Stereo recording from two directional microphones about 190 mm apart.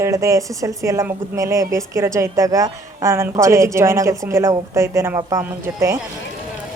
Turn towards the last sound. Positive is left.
turn(degrees=-15)  # may be behind; listen again after turning